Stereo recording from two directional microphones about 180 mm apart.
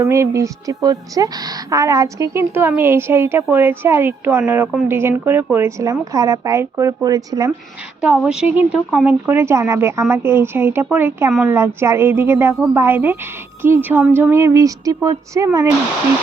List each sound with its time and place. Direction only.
0.0 s a woman's voice: 15° right (ahead or behind)
8.0 s a woman's voice: 5° right (ahead or behind)